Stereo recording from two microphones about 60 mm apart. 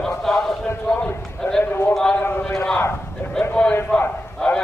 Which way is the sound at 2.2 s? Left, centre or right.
Left.